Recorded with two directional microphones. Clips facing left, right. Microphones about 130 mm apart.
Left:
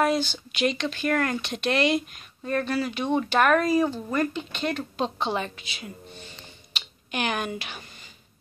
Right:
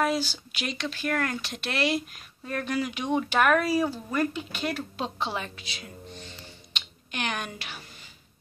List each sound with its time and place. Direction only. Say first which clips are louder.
0.0 s speech: left 3 dB; 5° right (ahead or behind)